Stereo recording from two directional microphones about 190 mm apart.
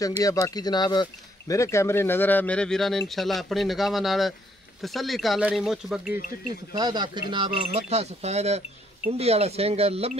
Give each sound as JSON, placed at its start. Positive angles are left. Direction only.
{"t": 0.2, "sound": "speech", "side_deg": 20}
{"t": 6.7, "sound": "speech", "side_deg": -20}